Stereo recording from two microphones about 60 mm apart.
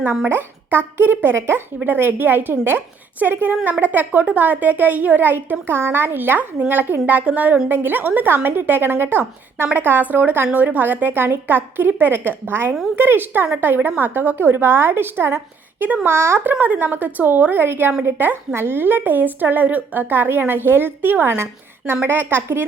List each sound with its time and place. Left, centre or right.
0.3 s a woman's voice: right
7.7 s a woman's voice: right